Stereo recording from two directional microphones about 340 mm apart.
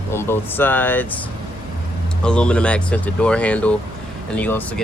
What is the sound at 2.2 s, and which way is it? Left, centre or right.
Speech, centre.